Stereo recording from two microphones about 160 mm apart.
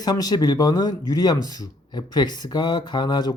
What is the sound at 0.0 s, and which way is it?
Speech, 25° left (ahead or behind).